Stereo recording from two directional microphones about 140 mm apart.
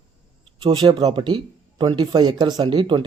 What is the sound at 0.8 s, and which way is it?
A man's voice, 30° right (ahead or behind).